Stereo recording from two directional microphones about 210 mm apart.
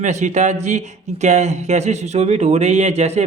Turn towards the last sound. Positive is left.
turn(degrees=-30)  # may be behind; listen again after turning